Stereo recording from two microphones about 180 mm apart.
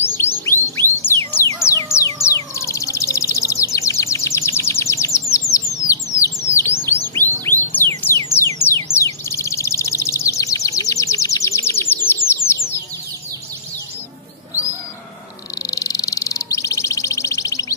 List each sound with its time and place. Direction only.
0.0 s a sound: 15° left (ahead or behind)
2.2 s bird: 15° left (ahead or behind)
6.9 s chirp: 10° left (ahead or behind)
7.6 s music: 10° left (ahead or behind)
9.0 s bird: 15° left (ahead or behind)
12.4 s a sound: 15° left (ahead or behind)
15.7 s bird: 20° left (ahead or behind)